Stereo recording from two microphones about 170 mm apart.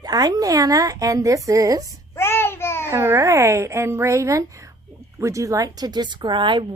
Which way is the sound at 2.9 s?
15° right (ahead or behind).